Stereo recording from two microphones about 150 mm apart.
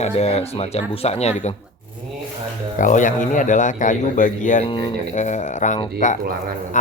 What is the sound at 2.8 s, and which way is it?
Speech, 60° left (ahead or behind).